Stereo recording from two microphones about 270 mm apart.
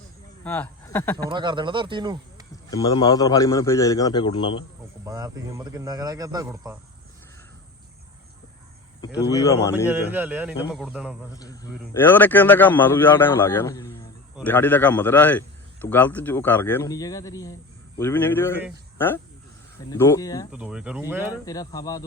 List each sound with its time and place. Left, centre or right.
0.4 s speech: centre
1.3 s a man's voice: centre
2.6 s a man's voice: centre
5.0 s a man's voice: centre
9.3 s a man's voice: centre
9.9 s speech: centre
11.3 s a man's voice: centre
20.5 s speech: centre
21.4 s a man's voice: centre